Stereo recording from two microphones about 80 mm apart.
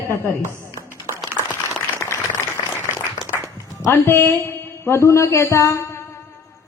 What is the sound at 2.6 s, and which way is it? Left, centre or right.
Applause, left.